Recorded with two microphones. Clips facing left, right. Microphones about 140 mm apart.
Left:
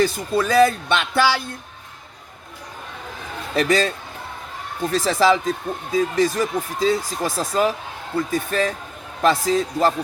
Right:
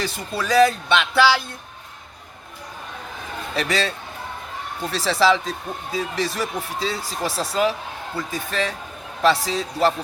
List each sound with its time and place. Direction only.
0.0 s speech: 45° left (ahead or behind)
3.5 s speech: 45° left (ahead or behind)